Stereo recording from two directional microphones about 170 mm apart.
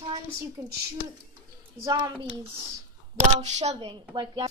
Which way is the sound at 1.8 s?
25° right (ahead or behind).